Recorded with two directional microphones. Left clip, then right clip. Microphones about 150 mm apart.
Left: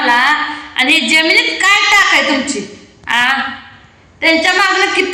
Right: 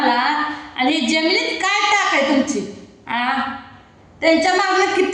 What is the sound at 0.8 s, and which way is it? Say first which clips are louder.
A woman's voice: left 7 dB; 25° right (ahead or behind).